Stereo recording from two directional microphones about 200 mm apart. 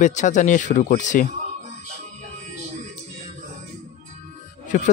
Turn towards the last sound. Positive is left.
turn(degrees=40)  # may be behind; listen again after turning